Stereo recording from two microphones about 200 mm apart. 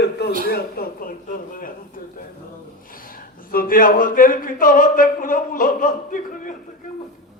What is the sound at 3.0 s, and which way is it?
Speech, 45° left (ahead or behind).